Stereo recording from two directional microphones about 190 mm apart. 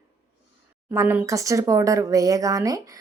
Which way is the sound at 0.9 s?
10° right (ahead or behind).